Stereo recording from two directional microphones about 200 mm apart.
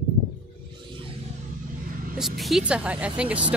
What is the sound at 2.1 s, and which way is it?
A woman's voice, centre (ahead or behind).